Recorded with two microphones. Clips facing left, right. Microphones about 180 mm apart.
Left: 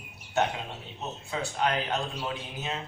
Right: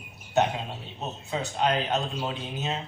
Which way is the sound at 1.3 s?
20° right (ahead or behind).